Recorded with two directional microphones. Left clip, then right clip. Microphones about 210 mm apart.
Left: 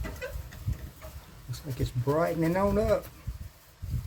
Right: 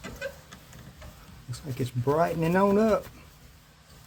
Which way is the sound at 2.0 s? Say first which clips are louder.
Right 2 dB; 30° right (ahead or behind).